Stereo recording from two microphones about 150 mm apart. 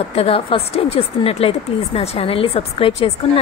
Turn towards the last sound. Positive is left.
turn(degrees=40)  # may be behind; listen again after turning